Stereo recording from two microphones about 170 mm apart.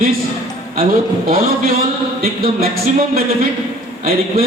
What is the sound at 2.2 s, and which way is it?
Speech, 60° right (ahead or behind).